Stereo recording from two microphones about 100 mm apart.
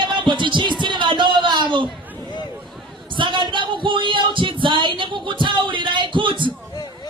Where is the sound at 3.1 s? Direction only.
55° right (ahead or behind).